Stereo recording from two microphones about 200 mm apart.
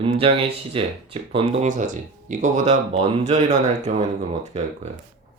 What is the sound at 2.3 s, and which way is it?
Speech, 35° right (ahead or behind).